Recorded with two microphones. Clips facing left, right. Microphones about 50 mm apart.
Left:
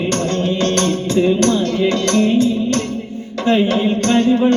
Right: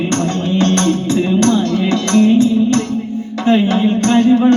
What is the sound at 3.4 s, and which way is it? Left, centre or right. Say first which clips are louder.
Speech: right 2 dB; right.